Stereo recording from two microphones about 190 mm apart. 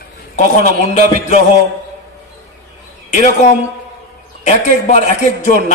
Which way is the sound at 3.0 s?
35° left (ahead or behind).